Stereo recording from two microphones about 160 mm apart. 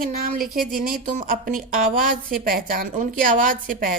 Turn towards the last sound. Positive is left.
turn(degrees=-65)  # may be behind; listen again after turning